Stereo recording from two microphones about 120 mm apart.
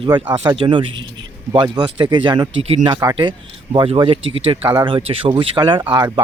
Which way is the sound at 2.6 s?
50° right (ahead or behind).